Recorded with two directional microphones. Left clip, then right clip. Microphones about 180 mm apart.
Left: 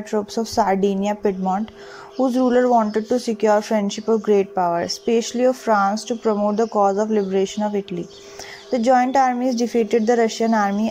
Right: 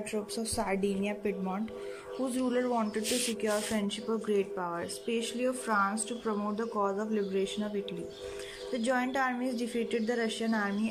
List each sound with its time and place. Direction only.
0.1 s speech: 40° left (ahead or behind)